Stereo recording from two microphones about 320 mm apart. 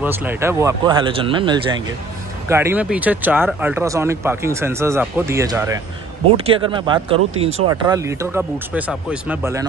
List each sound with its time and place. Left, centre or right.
0.0 s speech: centre